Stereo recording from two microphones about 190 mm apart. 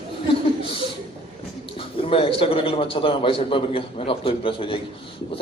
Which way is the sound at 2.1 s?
30° left (ahead or behind).